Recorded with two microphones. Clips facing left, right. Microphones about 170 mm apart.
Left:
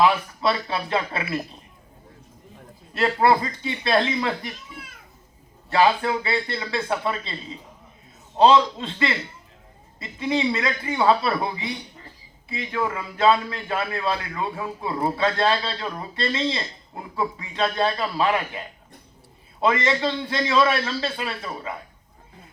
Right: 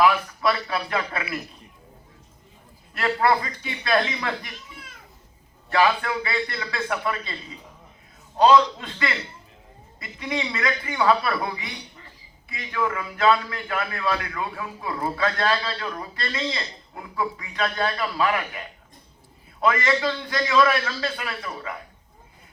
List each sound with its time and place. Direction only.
0.0 s a man's voice: 25° left (ahead or behind)
2.9 s a man's voice: 30° left (ahead or behind)
5.7 s a man's voice: 30° left (ahead or behind)
8.4 s a man's voice: 25° left (ahead or behind)
19.6 s a man's voice: 25° left (ahead or behind)